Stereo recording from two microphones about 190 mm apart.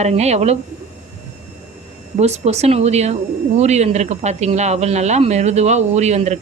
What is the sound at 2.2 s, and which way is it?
Speech, 35° right (ahead or behind).